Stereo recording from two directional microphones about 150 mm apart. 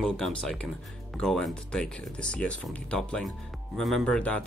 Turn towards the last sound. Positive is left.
turn(degrees=5)  # may be behind; listen again after turning